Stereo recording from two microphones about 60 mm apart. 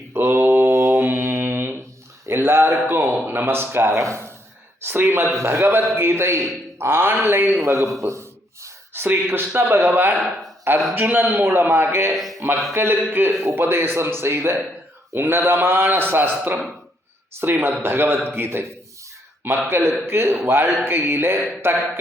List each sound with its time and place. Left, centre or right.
0.1 s mantra: right
0.7 s mantra: right
2.2 s a sound: right
2.9 s a man's voice: right
3.9 s speech: right
4.9 s a man's voice: right
5.3 s a man's voice: right
7.6 s speech: right
9.0 s a man's voice: right
12.1 s speech: centre
12.7 s a man's voice: right
19.6 s a man's voice: right